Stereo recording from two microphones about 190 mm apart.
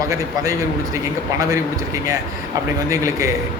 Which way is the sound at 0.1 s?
15° right (ahead or behind).